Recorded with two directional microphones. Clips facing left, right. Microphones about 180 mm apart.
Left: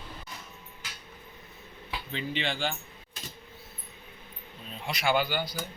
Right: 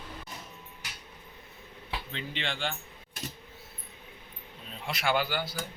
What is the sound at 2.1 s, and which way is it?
Speech, 5° left (ahead or behind).